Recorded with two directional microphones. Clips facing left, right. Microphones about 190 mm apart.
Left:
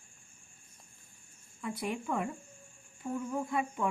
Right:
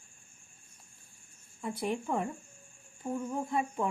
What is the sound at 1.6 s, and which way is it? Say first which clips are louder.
Speech: right 2 dB; 30° right (ahead or behind).